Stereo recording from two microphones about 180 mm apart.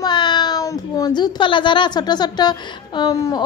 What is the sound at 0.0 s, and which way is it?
A child's voice, 25° left (ahead or behind).